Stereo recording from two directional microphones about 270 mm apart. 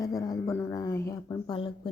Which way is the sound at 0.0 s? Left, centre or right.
Centre.